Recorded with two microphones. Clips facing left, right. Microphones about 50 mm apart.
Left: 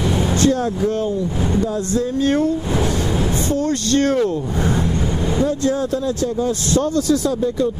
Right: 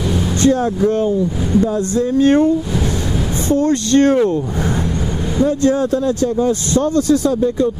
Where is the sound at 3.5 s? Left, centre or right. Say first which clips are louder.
Right 7 dB; right.